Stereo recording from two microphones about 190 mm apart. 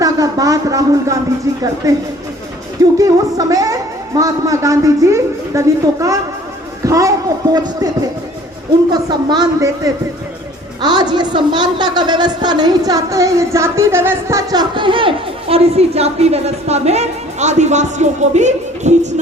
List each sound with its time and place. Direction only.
0.0 s a woman's voice: 20° right (ahead or behind)
8.9 s a woman's voice: 20° right (ahead or behind); by 19.2 s 40° right (ahead or behind)